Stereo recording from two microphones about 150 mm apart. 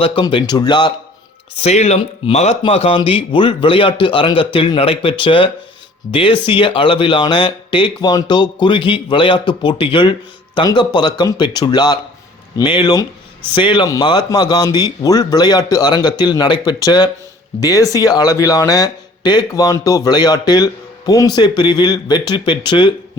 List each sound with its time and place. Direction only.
0.0 s speech: 35° left (ahead or behind)
1.6 s speech: 50° left (ahead or behind); by 22.9 s 30° left (ahead or behind)